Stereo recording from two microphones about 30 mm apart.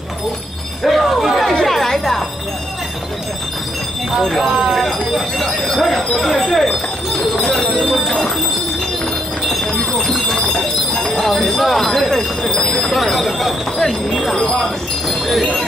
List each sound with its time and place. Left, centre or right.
0.8 s music: centre
4.7 s speech: centre
7.4 s speech: centre
7.8 s speech: centre
9.5 s train: centre
11.0 s jingle bell: centre
12.8 s speech: centre